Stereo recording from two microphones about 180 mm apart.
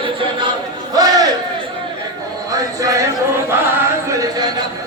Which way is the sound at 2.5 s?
20° right (ahead or behind).